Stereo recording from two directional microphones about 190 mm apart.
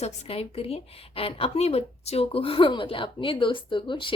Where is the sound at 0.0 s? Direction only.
35° left (ahead or behind).